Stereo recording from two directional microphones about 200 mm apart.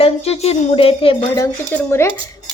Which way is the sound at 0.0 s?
30° left (ahead or behind).